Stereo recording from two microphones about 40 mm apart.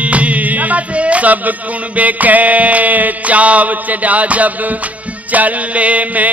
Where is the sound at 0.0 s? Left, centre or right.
Right.